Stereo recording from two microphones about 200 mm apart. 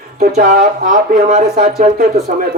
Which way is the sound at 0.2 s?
50° right (ahead or behind).